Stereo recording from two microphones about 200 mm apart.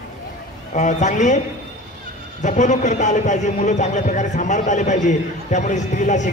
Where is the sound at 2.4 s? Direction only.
35° left (ahead or behind).